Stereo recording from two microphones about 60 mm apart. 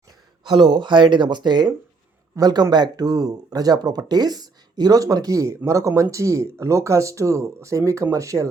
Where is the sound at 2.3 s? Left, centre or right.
Right.